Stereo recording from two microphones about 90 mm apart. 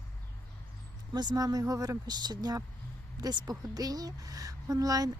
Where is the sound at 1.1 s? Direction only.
50° right (ahead or behind).